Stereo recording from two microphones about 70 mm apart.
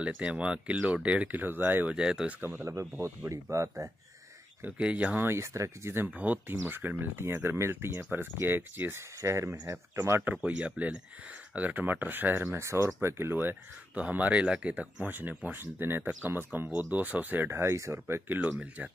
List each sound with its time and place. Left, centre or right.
0.0 s speech: centre
1.4 s speech: right
2.0 s speech: centre
2.4 s speech: right
4.6 s speech: centre
5.2 s speech: right
6.0 s speech: right
9.2 s speech: right
9.9 s speech: right
10.3 s speech: centre
12.5 s speech: right
13.9 s speech: right
17.5 s speech: right
18.8 s speech: right